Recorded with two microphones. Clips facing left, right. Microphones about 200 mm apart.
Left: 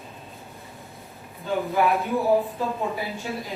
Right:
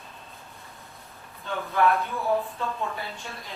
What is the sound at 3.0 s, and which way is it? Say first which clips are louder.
Speech: left 6 dB; 5° left (ahead or behind).